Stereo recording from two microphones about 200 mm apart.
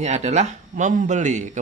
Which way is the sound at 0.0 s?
35° right (ahead or behind).